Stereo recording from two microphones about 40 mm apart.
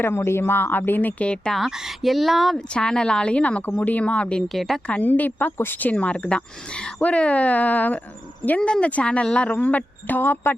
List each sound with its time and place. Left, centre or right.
0.0 s speech: left
1.2 s speech: left
1.5 s speech: centre
2.6 s speech: left
4.4 s speech: centre
5.0 s speech: left
5.9 s speech: left
8.6 s speech: left
9.5 s speech: left